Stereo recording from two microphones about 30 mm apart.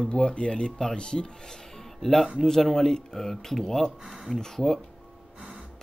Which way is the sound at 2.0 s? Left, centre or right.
Centre.